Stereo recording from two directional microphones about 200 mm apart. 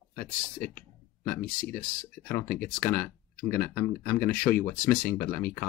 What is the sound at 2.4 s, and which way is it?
Speech, 45° left (ahead or behind).